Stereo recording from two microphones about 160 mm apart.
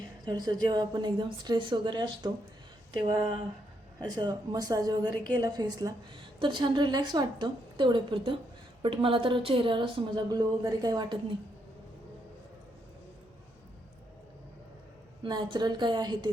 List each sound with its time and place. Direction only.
0.3 s a woman's voice: 25° right (ahead or behind)
15.2 s a woman's voice: 30° right (ahead or behind)